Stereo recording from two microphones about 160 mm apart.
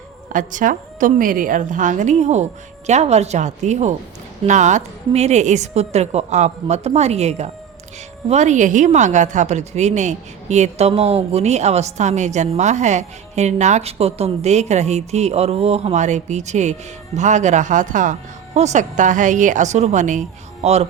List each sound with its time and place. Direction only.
0.3 s a woman's voice: 55° right (ahead or behind)